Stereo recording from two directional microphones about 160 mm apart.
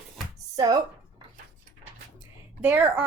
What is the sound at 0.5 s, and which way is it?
Speech, 25° right (ahead or behind).